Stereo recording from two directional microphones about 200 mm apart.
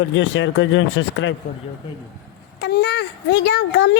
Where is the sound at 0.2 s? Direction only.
65° left (ahead or behind).